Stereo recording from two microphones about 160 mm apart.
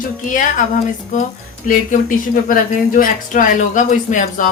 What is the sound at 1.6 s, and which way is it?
A woman's voice, 60° left (ahead or behind).